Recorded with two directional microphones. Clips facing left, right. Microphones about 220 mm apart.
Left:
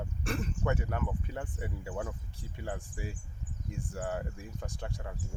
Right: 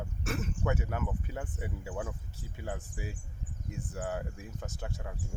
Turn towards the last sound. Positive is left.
turn(degrees=-5)  # may be behind; listen again after turning